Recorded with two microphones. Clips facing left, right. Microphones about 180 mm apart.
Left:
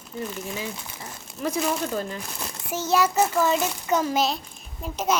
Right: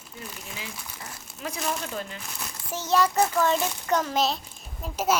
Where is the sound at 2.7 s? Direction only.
10° left (ahead or behind).